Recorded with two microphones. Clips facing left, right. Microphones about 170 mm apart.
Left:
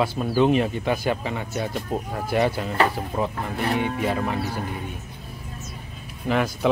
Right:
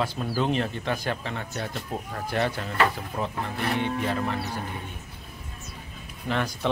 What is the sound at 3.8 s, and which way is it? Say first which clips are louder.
Speech: left 1 dB; 10° left (ahead or behind).